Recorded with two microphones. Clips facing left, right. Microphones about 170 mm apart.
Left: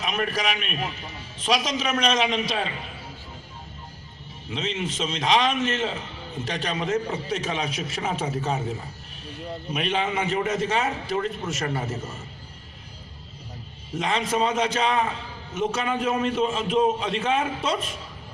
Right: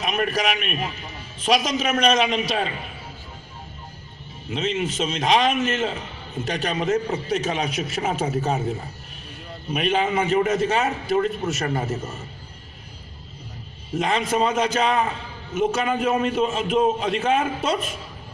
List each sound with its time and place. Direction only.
0.0 s a man's voice: 45° right (ahead or behind)
4.6 s a man's voice: 40° right (ahead or behind)
9.7 s a man's voice: 45° right (ahead or behind)
13.9 s a man's voice: 40° right (ahead or behind)
15.7 s a man's voice: 40° right (ahead or behind)